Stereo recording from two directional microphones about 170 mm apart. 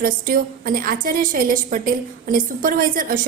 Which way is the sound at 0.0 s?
55° right (ahead or behind).